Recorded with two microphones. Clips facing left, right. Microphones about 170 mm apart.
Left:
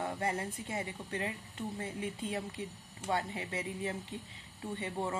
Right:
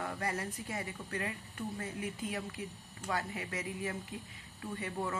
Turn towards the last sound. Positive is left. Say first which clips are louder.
# left 1 dB
turn(degrees=25)  # may be behind; listen again after turning